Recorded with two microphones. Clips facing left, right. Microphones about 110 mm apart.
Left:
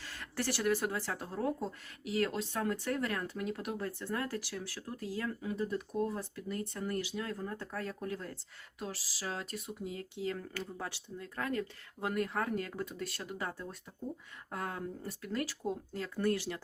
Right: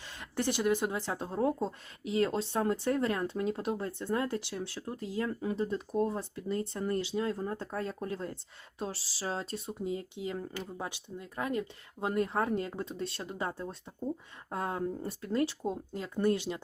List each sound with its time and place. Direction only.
0.0 s speech: 20° right (ahead or behind)